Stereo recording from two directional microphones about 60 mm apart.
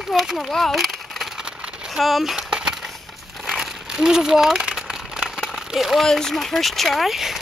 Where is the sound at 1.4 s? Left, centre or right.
Centre.